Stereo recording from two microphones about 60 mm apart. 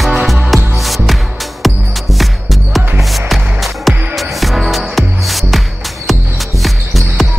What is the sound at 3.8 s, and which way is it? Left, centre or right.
Music, centre.